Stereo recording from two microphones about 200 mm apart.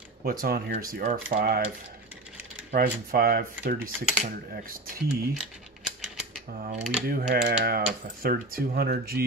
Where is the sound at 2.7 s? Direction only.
45° right (ahead or behind).